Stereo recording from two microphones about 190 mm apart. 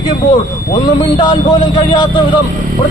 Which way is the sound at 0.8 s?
20° left (ahead or behind).